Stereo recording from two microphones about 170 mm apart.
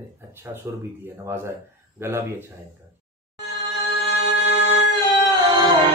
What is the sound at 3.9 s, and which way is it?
Music, 35° right (ahead or behind).